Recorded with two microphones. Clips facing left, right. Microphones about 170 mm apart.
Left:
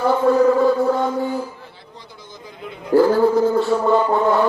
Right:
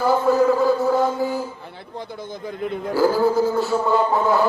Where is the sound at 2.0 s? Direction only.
55° right (ahead or behind).